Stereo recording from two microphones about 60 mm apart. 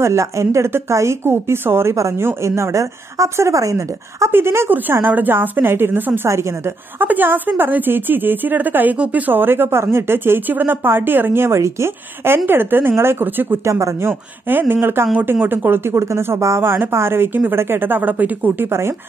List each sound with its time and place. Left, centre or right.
0.0 s a woman's voice: right
4.3 s a woman's voice: right
6.2 s a woman's voice: right
7.0 s a woman's voice: right
12.4 s a woman's voice: right
13.7 s speech: right
14.5 s a woman's voice: right
18.7 s a woman's voice: right